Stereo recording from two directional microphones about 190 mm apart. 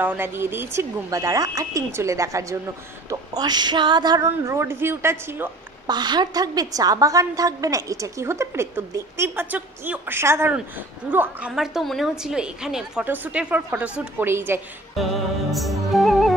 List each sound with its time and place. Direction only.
0.0 s a woman's voice: 10° right (ahead or behind)
15.5 s music: centre (ahead or behind)